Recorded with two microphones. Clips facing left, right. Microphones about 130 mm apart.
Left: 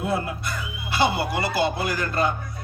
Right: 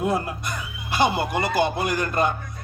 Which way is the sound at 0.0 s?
20° right (ahead or behind).